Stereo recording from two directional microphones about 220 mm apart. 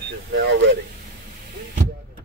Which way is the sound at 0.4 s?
55° right (ahead or behind).